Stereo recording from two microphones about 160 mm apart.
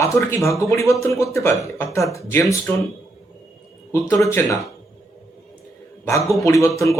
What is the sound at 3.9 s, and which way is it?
Speech, 20° left (ahead or behind).